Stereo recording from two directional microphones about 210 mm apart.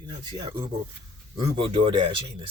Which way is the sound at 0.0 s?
20° right (ahead or behind).